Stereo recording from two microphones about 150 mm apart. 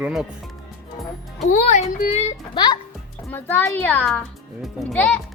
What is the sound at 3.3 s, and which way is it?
A child's voice, 15° left (ahead or behind).